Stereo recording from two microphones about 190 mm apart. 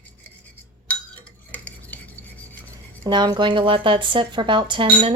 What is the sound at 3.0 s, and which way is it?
Speech, 20° right (ahead or behind).